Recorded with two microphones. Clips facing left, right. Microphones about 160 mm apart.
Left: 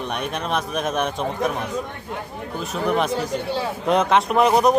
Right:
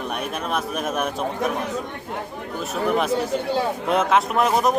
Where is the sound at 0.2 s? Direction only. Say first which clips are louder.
Left 2 dB; 5° right (ahead or behind).